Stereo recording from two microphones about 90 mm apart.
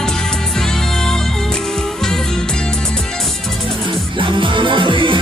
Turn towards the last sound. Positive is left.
turn(degrees=-70)  # may be behind; listen again after turning